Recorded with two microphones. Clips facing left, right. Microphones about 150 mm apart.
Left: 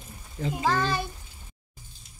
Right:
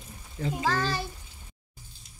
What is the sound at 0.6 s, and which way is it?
Speech, 20° left (ahead or behind).